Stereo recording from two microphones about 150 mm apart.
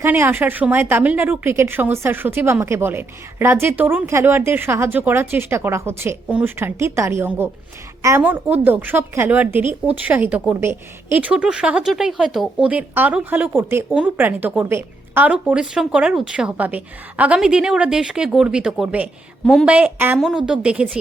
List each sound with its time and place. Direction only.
0.0 s speech: 15° right (ahead or behind)